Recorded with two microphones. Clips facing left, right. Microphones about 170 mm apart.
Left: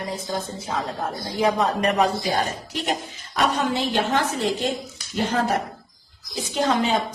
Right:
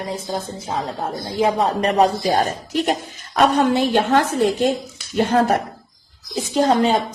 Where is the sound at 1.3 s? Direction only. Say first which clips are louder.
Right 3 dB; 30° right (ahead or behind); by 4.1 s 50° right (ahead or behind).